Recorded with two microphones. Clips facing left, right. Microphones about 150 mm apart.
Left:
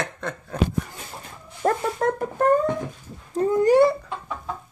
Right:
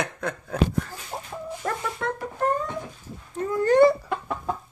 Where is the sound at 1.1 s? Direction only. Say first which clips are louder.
Right 7 dB; 45° right (ahead or behind).